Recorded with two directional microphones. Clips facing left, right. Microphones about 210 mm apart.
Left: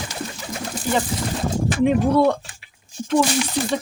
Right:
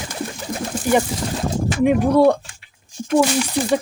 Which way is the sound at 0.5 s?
55° right (ahead or behind).